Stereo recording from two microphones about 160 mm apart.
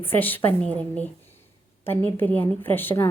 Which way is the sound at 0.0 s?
10° left (ahead or behind).